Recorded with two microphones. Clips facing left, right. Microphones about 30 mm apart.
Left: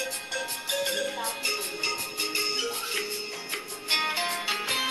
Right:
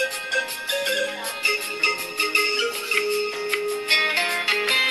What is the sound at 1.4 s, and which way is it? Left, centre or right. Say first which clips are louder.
Music: right 11 dB; right.